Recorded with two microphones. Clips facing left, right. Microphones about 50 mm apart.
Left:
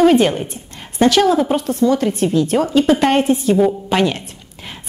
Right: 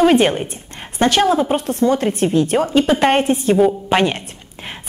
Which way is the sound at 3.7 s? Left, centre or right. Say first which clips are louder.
Even; right.